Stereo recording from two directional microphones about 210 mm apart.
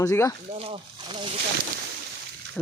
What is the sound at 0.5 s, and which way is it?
Speech, 25° right (ahead or behind).